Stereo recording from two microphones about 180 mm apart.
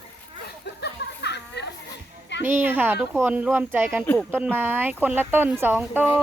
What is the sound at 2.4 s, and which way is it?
Speech, 10° right (ahead or behind).